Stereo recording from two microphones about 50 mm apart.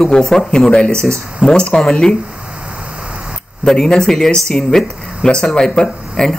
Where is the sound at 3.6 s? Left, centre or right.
Centre.